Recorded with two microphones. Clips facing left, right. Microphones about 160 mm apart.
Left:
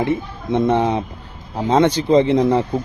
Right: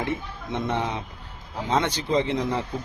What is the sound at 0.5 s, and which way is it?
A man's voice, 40° left (ahead or behind).